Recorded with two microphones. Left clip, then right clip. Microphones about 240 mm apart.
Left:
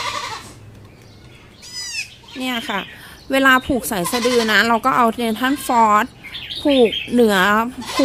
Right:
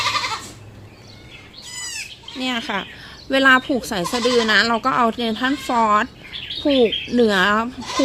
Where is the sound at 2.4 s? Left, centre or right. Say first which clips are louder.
Left 1 dB; centre.